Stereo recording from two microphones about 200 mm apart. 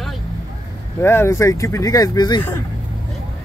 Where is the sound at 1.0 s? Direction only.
10° left (ahead or behind).